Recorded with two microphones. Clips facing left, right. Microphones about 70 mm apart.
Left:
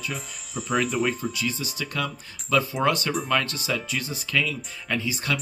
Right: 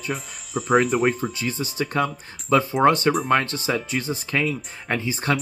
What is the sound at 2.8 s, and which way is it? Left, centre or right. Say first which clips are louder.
Speech: right 6 dB; right.